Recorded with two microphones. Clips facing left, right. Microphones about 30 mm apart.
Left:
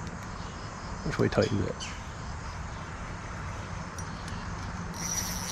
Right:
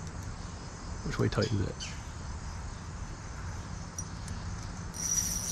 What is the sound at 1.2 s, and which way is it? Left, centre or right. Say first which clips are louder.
Speech: left 5 dB; centre.